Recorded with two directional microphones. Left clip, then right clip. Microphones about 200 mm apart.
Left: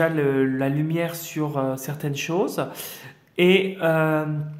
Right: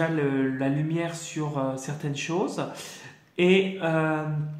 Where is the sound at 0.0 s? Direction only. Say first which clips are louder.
Left 5 dB; 40° left (ahead or behind).